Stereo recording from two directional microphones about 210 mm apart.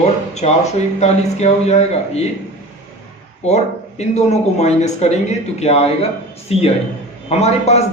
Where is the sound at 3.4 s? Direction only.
30° left (ahead or behind).